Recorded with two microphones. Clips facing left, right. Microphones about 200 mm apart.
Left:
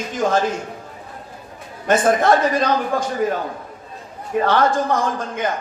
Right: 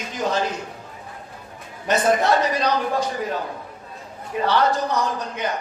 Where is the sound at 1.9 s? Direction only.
50° left (ahead or behind).